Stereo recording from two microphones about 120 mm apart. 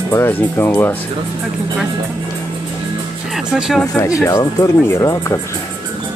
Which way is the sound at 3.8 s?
25° left (ahead or behind).